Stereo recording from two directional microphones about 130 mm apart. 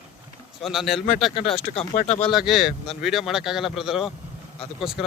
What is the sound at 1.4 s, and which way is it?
Speech, 45° left (ahead or behind).